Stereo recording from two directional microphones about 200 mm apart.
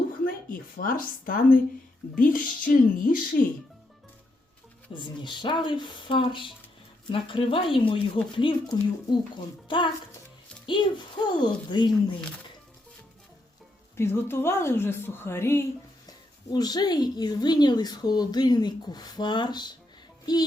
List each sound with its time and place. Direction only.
0.3 s a woman's voice: 45° left (ahead or behind)
4.9 s speech: 25° left (ahead or behind)
13.9 s a woman's voice: 10° left (ahead or behind)